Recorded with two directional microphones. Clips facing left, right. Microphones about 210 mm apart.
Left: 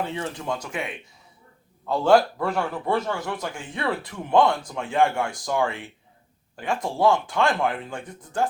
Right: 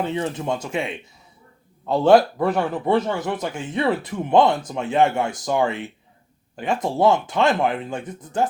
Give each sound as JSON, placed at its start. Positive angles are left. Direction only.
{"t": 0.0, "sound": "a man's voice", "side_deg": -20}